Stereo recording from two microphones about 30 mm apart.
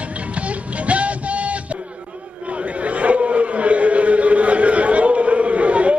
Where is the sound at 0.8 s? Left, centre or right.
Right.